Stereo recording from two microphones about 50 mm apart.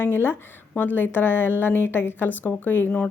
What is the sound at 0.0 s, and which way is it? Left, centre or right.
A woman's voice, left.